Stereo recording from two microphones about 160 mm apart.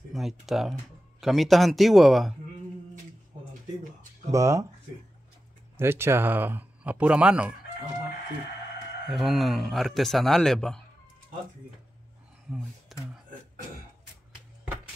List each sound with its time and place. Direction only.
0.1 s a man's voice: centre (ahead or behind)
4.3 s speech: 20° right (ahead or behind)
5.8 s speech: 15° right (ahead or behind)
9.1 s a man's voice: centre (ahead or behind)
12.4 s a sound: centre (ahead or behind)